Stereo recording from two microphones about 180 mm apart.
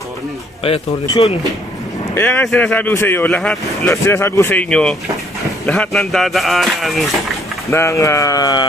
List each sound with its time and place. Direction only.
0.7 s a man's voice: 30° left (ahead or behind)
2.1 s speech: 10° left (ahead or behind)
7.7 s speech: 15° left (ahead or behind)